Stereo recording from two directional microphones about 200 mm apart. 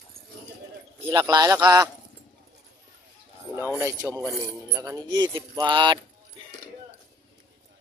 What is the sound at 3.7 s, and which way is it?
Speech, 15° right (ahead or behind).